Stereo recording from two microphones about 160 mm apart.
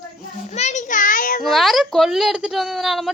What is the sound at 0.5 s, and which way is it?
Speech, 45° left (ahead or behind).